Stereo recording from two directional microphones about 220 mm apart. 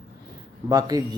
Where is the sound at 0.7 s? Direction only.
15° right (ahead or behind).